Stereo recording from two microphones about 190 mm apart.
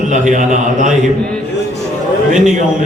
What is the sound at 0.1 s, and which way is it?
Speech, 40° right (ahead or behind).